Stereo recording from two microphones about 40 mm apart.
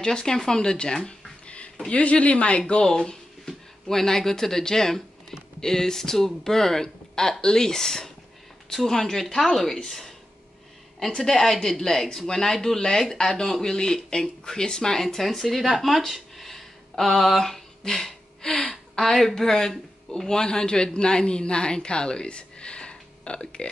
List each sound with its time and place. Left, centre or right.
0.0 s speech: centre
1.4 s a sound: left
1.9 s speech: left
2.8 s speech: centre
11.3 s speech: centre
16.1 s a sound: centre
17.8 s a man's voice: centre